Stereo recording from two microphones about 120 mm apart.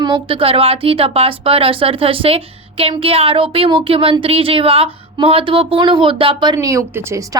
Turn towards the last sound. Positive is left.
turn(degrees=-25)  # may be behind; listen again after turning